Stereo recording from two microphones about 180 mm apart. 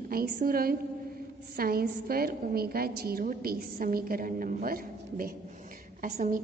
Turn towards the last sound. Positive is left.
turn(degrees=-45)  # may be behind; listen again after turning